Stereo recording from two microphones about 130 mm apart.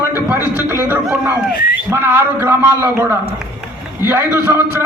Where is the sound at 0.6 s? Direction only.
15° right (ahead or behind).